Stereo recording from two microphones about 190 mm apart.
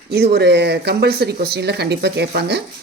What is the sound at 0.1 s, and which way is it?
Speech, 55° right (ahead or behind).